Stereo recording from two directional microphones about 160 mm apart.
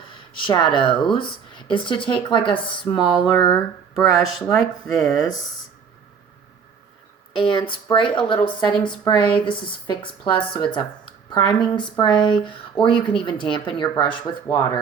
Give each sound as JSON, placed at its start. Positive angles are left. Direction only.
{"t": 0.1, "sound": "speech", "side_deg": 30}
{"t": 3.5, "sound": "speech", "side_deg": 0}
{"t": 7.3, "sound": "speech", "side_deg": 30}
{"t": 10.5, "sound": "a sound", "side_deg": 30}
{"t": 11.4, "sound": "speech", "side_deg": 30}